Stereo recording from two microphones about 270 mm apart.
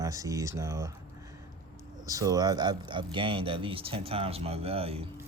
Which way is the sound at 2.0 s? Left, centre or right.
Centre.